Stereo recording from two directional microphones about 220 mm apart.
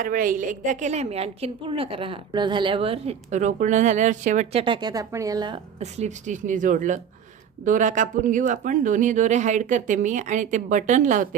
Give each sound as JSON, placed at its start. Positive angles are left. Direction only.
{"t": 0.0, "sound": "a woman's voice", "side_deg": -40}
{"t": 4.6, "sound": "a woman's voice", "side_deg": -20}
{"t": 5.8, "sound": "a woman's voice", "side_deg": -30}